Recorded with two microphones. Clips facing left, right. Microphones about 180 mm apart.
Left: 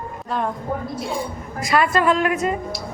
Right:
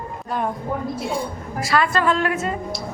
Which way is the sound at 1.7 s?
20° left (ahead or behind).